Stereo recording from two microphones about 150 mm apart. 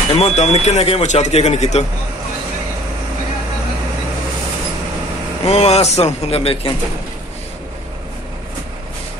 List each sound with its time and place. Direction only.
0.1 s speech: 45° left (ahead or behind)
5.4 s speech: 45° left (ahead or behind)